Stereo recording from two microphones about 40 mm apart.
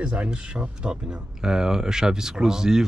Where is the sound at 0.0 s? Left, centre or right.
Right.